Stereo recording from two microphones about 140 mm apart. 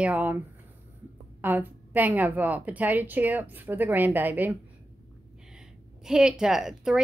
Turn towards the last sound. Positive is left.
turn(degrees=-5)  # may be behind; listen again after turning